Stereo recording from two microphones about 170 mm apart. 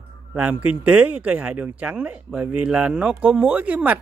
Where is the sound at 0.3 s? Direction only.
10° right (ahead or behind).